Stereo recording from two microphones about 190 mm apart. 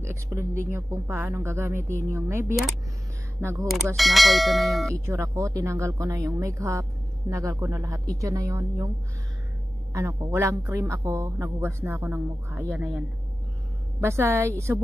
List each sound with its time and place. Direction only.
0.0 s a man's voice: 15° right (ahead or behind)
3.9 s speech: centre (ahead or behind)
4.9 s a man's voice: 15° right (ahead or behind)
9.9 s a man's voice: 15° right (ahead or behind)
14.0 s a man's voice: 15° right (ahead or behind)